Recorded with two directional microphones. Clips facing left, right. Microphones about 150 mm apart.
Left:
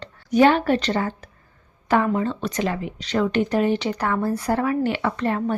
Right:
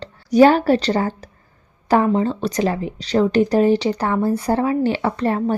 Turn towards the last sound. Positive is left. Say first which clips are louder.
# right 3 dB
turn(degrees=-35)  # may be behind; listen again after turning